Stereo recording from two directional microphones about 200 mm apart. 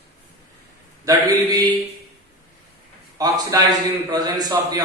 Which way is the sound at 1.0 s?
20° right (ahead or behind).